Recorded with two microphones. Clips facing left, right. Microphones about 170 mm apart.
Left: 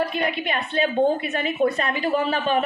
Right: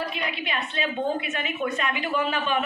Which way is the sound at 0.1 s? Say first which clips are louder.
Left 6 dB; 50° left (ahead or behind).